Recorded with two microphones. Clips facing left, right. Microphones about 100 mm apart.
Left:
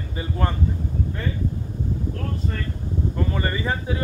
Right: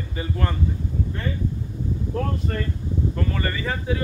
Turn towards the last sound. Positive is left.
turn(degrees=20)  # may be behind; listen again after turning